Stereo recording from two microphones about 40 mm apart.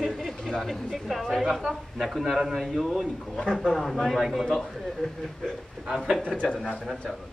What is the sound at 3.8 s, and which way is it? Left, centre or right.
Speech, centre.